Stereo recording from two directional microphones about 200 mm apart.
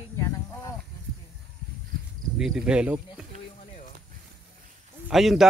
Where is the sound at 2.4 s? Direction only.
5° right (ahead or behind).